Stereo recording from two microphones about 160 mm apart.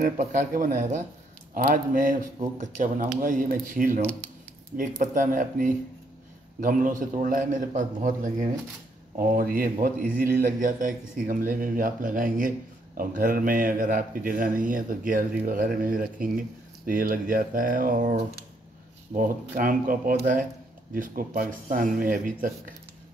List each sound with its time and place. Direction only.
0.0 s a man's voice: 50° right (ahead or behind)
19.5 s a man's voice: 60° right (ahead or behind)